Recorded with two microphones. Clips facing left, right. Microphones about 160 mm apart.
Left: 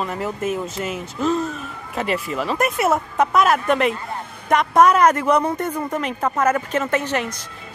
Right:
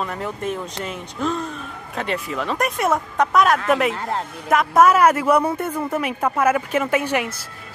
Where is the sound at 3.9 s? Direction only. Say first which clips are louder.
Right 5 dB; 80° right.